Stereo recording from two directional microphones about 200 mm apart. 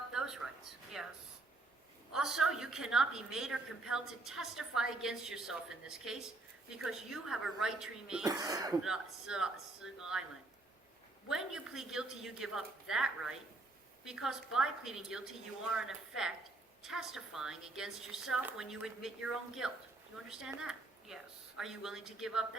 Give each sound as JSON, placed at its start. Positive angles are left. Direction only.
{"t": 0.1, "sound": "a sound", "side_deg": -5}
{"t": 0.9, "sound": "a woman's voice", "side_deg": -5}
{"t": 2.1, "sound": "a woman's voice", "side_deg": -5}
{"t": 8.2, "sound": "speech", "side_deg": -20}
{"t": 8.8, "sound": "a woman's voice", "side_deg": -5}
{"t": 11.3, "sound": "a woman's voice", "side_deg": -5}